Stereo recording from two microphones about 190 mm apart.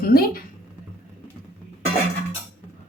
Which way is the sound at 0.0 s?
50° left (ahead or behind).